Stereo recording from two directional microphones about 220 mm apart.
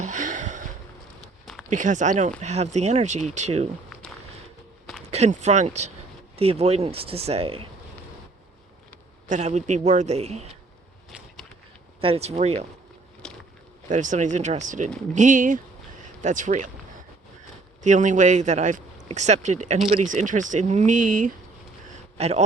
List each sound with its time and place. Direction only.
0.0 s a sound: 35° right (ahead or behind)
1.7 s a man's voice: 35° right (ahead or behind)
5.1 s a man's voice: 30° right (ahead or behind)
9.3 s a man's voice: 30° right (ahead or behind)
11.9 s speech: 25° right (ahead or behind)
13.2 s biting: 5° left (ahead or behind)
13.9 s a man's voice: 35° right (ahead or behind)
17.8 s a man's voice: 35° right (ahead or behind)